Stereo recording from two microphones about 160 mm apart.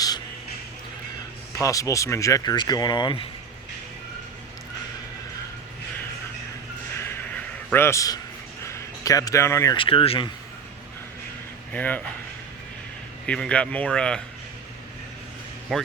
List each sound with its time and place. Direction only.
1.5 s speech: 20° left (ahead or behind)
7.0 s a sound: 15° left (ahead or behind)
9.7 s speech: 35° left (ahead or behind)
11.7 s speech: 10° left (ahead or behind)
13.2 s speech: 5° left (ahead or behind)
15.7 s speech: centre (ahead or behind)